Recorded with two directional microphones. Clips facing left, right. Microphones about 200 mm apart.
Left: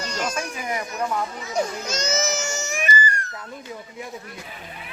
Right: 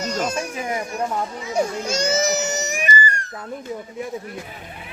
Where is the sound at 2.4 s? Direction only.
20° right (ahead or behind).